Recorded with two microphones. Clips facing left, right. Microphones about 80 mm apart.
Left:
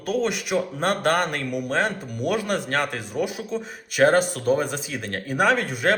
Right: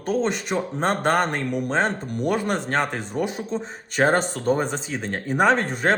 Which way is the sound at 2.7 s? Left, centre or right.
Right.